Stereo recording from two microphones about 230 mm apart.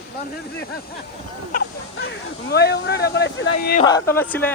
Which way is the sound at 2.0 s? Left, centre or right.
Left.